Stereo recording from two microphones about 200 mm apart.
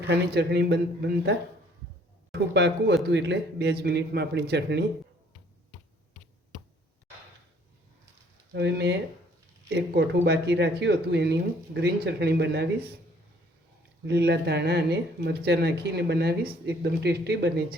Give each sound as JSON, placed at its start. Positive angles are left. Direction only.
{"t": 0.1, "sound": "speech", "side_deg": -55}
{"t": 8.5, "sound": "speech", "side_deg": -60}
{"t": 14.0, "sound": "speech", "side_deg": -55}